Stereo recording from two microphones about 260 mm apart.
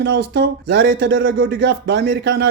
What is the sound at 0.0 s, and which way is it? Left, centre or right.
Speech, right.